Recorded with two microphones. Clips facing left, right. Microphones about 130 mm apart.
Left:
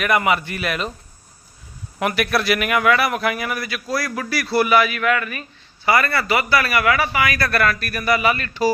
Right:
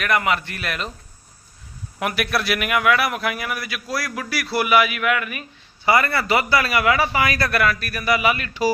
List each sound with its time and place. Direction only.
0.0 s a man's voice: 5° left (ahead or behind)
2.0 s a man's voice: centre (ahead or behind)
5.8 s a man's voice: 20° right (ahead or behind)
7.4 s speech: 10° right (ahead or behind)